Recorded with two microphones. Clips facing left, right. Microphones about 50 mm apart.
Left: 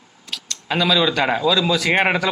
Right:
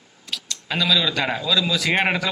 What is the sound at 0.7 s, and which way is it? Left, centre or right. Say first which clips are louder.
Speech: left 3 dB; centre.